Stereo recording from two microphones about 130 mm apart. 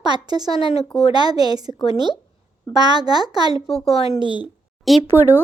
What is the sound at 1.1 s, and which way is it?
Speech, 30° right (ahead or behind).